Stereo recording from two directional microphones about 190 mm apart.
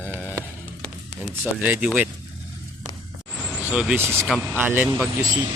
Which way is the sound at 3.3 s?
5° left (ahead or behind).